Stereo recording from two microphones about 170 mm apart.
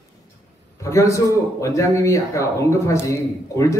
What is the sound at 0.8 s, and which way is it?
A man's voice, 20° left (ahead or behind).